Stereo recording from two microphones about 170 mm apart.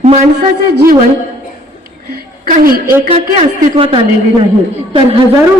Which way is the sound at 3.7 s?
30° right (ahead or behind).